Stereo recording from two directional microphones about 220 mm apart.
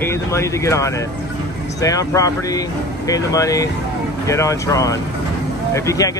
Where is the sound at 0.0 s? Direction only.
10° left (ahead or behind).